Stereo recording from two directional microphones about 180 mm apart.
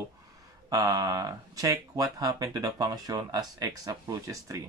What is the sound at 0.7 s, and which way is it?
Speech, 20° right (ahead or behind).